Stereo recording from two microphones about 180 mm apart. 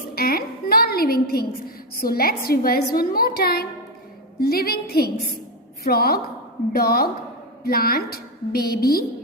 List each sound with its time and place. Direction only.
0.1 s a woman's voice: 55° left (ahead or behind)